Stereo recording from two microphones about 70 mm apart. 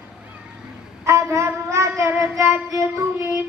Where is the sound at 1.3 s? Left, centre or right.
Right.